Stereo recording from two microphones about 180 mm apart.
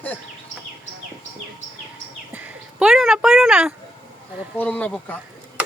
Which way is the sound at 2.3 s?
5° right (ahead or behind).